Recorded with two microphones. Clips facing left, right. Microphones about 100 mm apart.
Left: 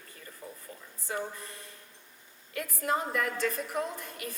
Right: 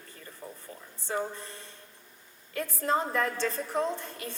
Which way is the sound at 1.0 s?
30° right (ahead or behind).